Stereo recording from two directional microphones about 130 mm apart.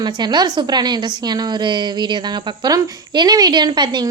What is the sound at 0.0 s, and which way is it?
A woman's voice, 35° right (ahead or behind).